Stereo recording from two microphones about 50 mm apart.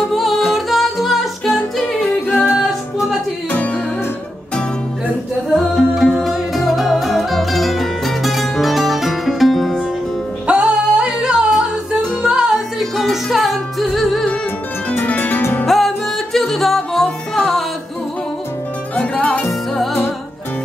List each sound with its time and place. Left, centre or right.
0.1 s music: centre
2.0 s a capella: left
5.5 s music: centre
10.4 s music: centre
12.7 s music: centre
15.0 s music: left
15.6 s music: centre
19.7 s music: centre